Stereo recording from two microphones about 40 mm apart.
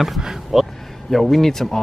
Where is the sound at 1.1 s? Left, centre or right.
Centre.